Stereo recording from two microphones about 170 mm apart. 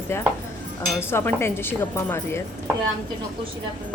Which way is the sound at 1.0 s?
15° left (ahead or behind).